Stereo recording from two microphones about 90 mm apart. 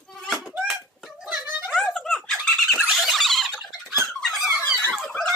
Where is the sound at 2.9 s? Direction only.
Centre (ahead or behind).